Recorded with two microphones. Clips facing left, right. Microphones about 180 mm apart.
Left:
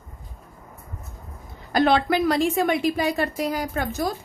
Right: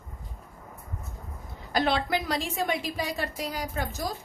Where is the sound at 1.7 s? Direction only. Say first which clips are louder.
Left 7 dB; 55° left (ahead or behind).